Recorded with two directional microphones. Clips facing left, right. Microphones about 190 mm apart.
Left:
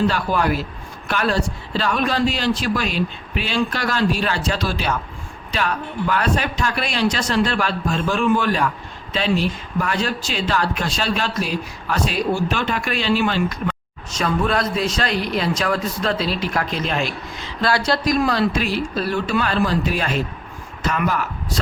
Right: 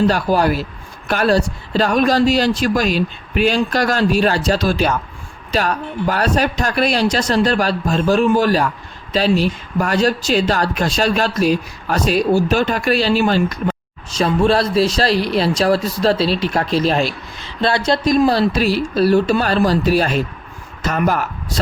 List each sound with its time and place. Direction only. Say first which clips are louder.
0.1 s speech: right 5 dB; 35° right (ahead or behind)